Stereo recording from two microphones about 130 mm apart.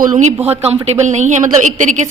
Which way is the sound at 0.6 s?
55° right (ahead or behind).